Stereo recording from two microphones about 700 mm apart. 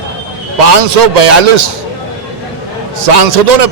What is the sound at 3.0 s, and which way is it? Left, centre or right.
Speech, right.